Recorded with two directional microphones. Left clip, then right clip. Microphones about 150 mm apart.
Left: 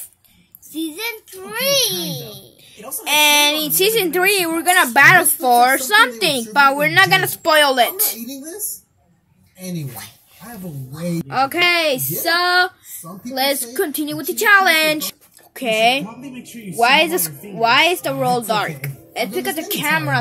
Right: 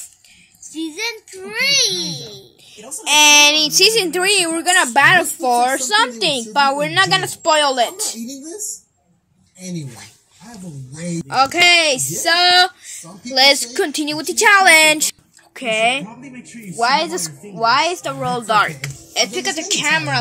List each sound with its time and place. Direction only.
0.7 s a child's voice: 55° left (ahead or behind)
2.7 s a woman's voice: 5° right (ahead or behind)
11.0 s a woman's voice: 10° right (ahead or behind)